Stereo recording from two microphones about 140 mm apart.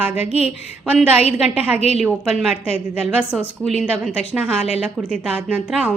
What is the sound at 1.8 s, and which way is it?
Speech, 45° left (ahead or behind).